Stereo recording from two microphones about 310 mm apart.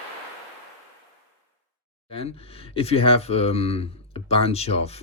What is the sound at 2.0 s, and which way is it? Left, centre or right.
Speech, centre.